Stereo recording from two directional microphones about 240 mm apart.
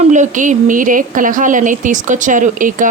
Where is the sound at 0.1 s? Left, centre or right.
Right.